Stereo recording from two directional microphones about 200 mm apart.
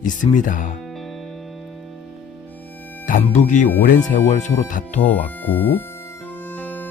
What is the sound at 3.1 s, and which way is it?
Speech, 40° left (ahead or behind).